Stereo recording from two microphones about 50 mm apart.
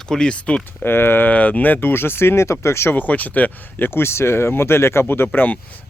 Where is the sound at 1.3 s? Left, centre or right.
Left.